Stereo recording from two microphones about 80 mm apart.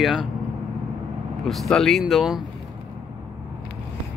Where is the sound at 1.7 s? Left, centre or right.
Centre.